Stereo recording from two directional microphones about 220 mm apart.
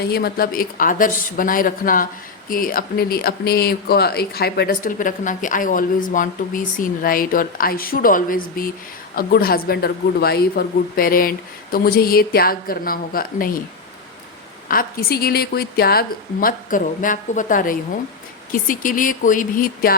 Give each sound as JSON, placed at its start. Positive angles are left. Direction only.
{"t": 0.0, "sound": "speech", "side_deg": 45}
{"t": 14.7, "sound": "speech", "side_deg": 40}